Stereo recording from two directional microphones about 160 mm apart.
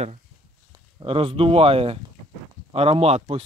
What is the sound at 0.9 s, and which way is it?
Speech, 35° right (ahead or behind).